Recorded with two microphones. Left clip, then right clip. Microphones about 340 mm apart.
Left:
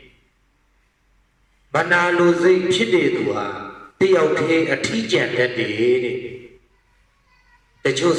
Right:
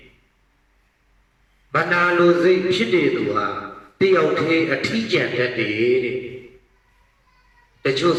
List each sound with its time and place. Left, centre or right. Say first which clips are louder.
1.7 s a man's voice: left 1 dB; centre
7.8 s a woman's voice: even; centre